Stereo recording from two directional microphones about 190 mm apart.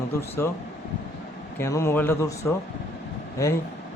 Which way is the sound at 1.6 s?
15° left (ahead or behind).